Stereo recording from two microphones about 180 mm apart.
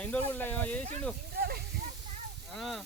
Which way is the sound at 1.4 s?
60° right (ahead or behind).